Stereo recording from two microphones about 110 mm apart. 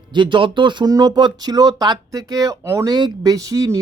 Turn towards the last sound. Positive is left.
turn(degrees=-30)  # may be behind; listen again after turning